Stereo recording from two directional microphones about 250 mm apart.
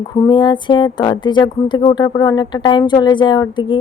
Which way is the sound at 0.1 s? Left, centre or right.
Centre.